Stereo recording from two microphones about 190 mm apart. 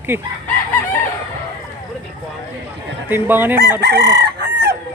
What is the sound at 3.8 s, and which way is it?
Chicken, 65° right (ahead or behind).